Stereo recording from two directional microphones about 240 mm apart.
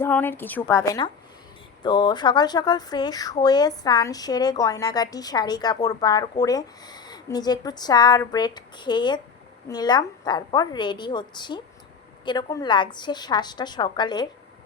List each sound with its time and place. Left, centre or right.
0.0 s a woman's voice: centre